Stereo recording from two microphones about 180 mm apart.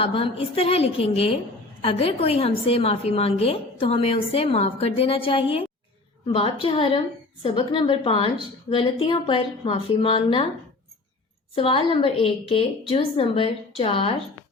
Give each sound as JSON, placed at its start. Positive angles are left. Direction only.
{"t": 0.0, "sound": "a woman's voice", "side_deg": 30}
{"t": 11.5, "sound": "a woman's voice", "side_deg": 30}